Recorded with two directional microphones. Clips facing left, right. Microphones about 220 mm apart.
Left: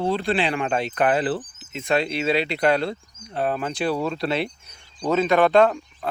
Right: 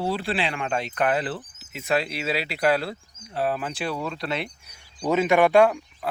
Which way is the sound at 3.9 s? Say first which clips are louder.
Left 5 dB; 30° left (ahead or behind).